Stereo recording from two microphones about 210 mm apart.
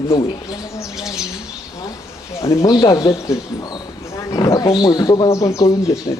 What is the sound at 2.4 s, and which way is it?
Speech, 15° left (ahead or behind).